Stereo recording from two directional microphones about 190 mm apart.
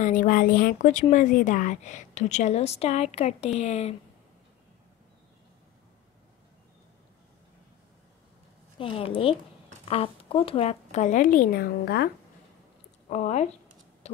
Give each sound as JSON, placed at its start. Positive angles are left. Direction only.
{"t": 0.0, "sound": "a woman's voice", "side_deg": 45}
{"t": 8.7, "sound": "a woman's voice", "side_deg": 30}
{"t": 13.1, "sound": "a woman's voice", "side_deg": 35}
{"t": 14.0, "sound": "a sound", "side_deg": 35}